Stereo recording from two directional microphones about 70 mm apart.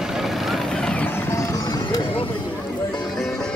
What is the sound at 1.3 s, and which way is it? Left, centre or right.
Music, left.